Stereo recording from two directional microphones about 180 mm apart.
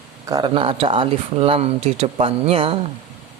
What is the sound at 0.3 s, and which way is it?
Speech, 25° right (ahead or behind).